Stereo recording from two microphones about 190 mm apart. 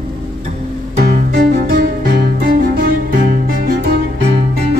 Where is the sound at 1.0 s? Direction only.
55° right (ahead or behind).